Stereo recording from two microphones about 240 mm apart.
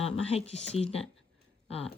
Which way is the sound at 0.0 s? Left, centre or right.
Left.